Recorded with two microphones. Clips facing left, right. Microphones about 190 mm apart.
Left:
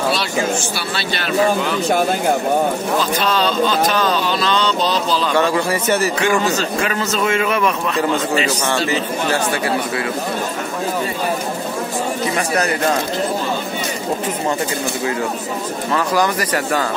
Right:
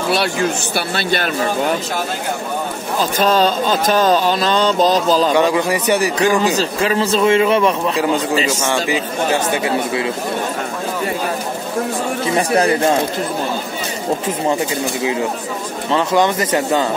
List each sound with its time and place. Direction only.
0.1 s mantra: 55° right (ahead or behind)
3.0 s mantra: 45° right (ahead or behind)
5.3 s speech: 15° right (ahead or behind)
6.1 s a man's voice: 35° right (ahead or behind)
8.6 s speech: 15° right (ahead or behind)
12.4 s speech: 30° right (ahead or behind)
15.9 s speech: 25° right (ahead or behind)